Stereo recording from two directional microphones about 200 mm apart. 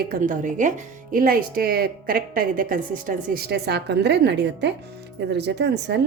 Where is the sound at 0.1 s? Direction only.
40° right (ahead or behind).